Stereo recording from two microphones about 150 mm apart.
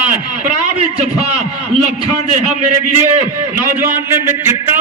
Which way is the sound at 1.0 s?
45° right (ahead or behind).